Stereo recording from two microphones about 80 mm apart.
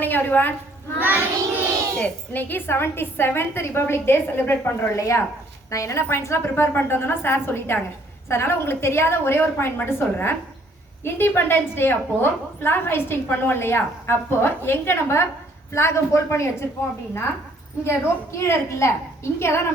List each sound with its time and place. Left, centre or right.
0.0 s a woman's voice: left
0.9 s child singing: right
2.0 s a woman's voice: left
4.9 s a woman's voice: left
17.8 s a woman's voice: left